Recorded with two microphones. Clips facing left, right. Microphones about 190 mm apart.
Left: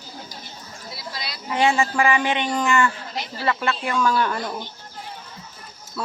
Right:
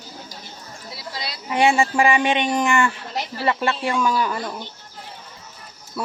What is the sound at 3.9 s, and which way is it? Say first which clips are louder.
Speech: left 3 dB; 10° right (ahead or behind).